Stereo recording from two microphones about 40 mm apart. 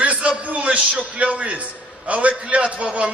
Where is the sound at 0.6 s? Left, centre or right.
Right.